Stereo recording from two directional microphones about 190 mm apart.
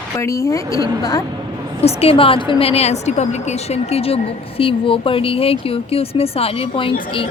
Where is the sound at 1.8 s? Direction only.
30° left (ahead or behind).